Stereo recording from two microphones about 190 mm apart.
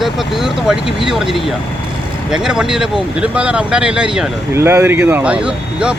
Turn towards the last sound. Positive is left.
turn(degrees=-5)  # may be behind; listen again after turning